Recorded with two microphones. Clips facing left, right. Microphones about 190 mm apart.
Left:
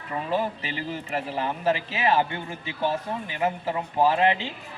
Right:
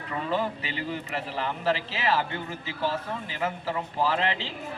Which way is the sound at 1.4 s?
15° left (ahead or behind).